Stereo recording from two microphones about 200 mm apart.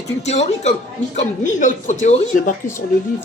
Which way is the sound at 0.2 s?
35° left (ahead or behind).